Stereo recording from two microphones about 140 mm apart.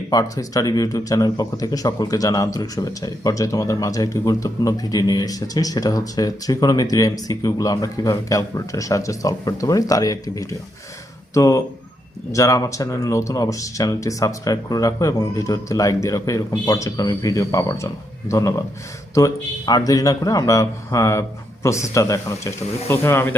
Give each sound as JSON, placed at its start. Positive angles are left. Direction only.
{"t": 0.1, "sound": "speech", "side_deg": 25}